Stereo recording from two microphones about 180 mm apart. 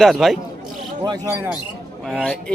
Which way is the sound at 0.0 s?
Centre (ahead or behind).